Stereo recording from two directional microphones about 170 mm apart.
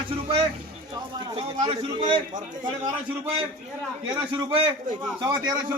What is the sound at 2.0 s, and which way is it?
Speech, 45° right (ahead or behind).